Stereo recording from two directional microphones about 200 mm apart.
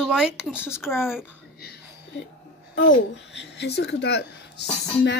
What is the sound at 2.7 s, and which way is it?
A child's voice, 65° left (ahead or behind).